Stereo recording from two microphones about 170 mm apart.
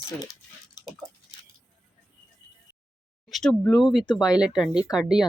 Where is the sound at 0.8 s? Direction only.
25° left (ahead or behind).